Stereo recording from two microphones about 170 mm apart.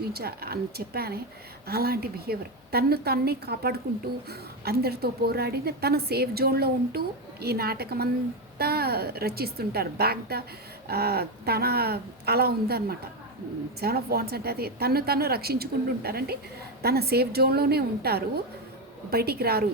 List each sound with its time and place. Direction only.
0.1 s a woman's voice: 65° right (ahead or behind)